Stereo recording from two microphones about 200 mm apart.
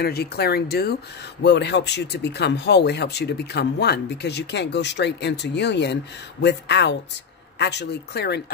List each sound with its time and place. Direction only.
0.0 s speech: 55° left (ahead or behind)